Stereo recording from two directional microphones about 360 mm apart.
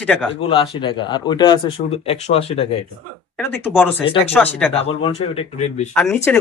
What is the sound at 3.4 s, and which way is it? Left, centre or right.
Speech, centre.